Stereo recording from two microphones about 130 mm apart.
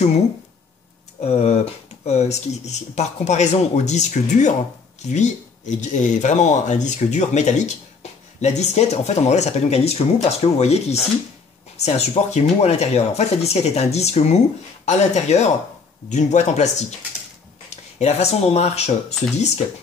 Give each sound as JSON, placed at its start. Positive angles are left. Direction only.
{"t": 1.2, "sound": "speech", "side_deg": 55}
{"t": 17.9, "sound": "speech", "side_deg": 55}